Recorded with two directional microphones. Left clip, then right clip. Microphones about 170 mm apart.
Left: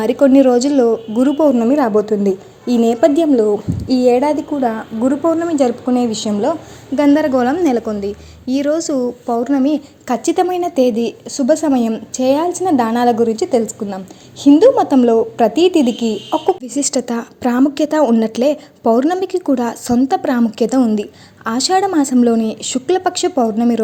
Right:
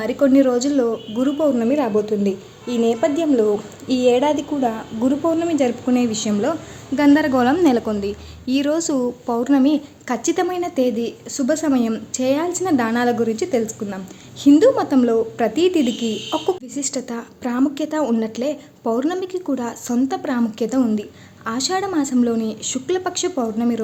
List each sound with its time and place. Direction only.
0.0 s a woman's voice: 30° left (ahead or behind)
3.3 s a woman's voice: 15° left (ahead or behind)
9.7 s a woman's voice: 20° left (ahead or behind)
16.6 s a woman's voice: 35° left (ahead or behind)